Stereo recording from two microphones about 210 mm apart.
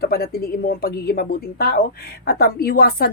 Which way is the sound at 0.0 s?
45° left (ahead or behind).